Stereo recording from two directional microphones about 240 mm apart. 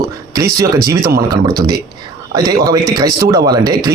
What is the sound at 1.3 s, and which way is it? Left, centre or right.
A man's voice, centre.